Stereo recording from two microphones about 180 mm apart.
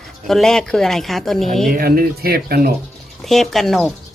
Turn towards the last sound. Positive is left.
turn(degrees=0)  # may be behind; listen again after turning